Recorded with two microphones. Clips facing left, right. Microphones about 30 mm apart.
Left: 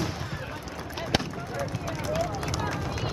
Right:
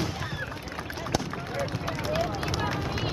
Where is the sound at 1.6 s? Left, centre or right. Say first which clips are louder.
Right 1 dB; right.